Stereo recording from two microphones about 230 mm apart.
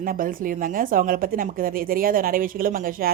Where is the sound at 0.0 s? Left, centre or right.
Right.